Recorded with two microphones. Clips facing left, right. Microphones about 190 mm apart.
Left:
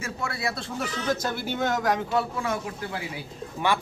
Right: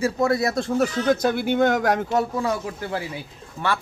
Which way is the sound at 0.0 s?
40° right (ahead or behind).